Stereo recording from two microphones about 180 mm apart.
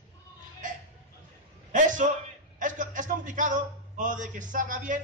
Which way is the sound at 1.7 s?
45° right (ahead or behind).